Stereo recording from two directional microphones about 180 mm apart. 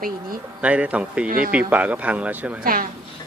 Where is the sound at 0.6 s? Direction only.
5° right (ahead or behind).